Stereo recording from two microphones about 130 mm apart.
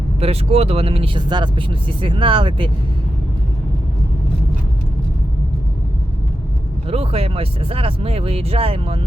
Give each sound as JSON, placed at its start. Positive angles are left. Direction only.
{"t": 0.2, "sound": "speech", "side_deg": -50}
{"t": 6.8, "sound": "speech", "side_deg": -50}